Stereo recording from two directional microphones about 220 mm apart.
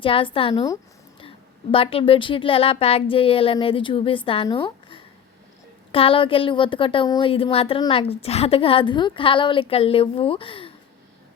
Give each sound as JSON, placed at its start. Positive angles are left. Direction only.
{"t": 0.0, "sound": "a woman's voice", "side_deg": 25}